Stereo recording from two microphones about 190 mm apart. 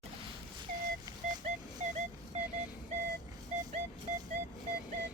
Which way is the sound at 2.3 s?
40° right (ahead or behind).